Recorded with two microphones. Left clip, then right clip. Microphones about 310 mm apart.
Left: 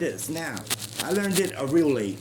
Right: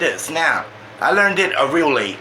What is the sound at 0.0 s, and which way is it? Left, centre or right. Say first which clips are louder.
A man's voice: right 12 dB; left.